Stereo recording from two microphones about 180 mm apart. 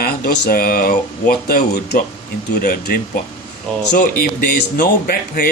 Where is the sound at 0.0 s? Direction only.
55° left (ahead or behind).